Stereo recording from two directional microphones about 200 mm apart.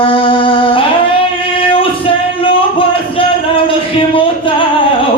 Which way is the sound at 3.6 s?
25° left (ahead or behind).